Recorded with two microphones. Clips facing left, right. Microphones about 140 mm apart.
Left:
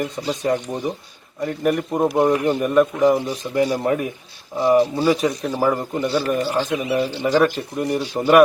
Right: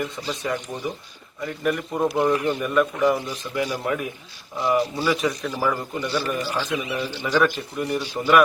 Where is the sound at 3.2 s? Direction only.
40° left (ahead or behind).